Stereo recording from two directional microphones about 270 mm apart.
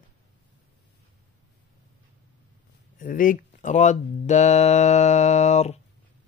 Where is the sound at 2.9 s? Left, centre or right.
Left.